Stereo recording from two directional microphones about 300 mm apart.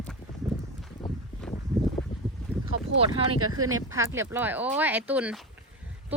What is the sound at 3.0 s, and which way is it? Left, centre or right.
Speech, centre.